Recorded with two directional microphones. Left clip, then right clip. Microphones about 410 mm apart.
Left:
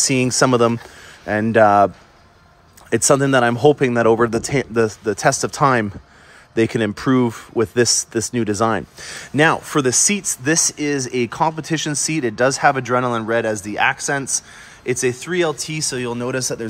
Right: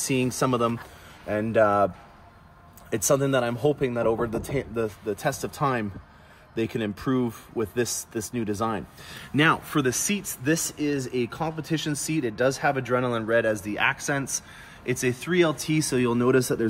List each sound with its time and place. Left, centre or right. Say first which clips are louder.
0.0 s speech: left 9 dB; centre
2.9 s speech: left 8 dB; centre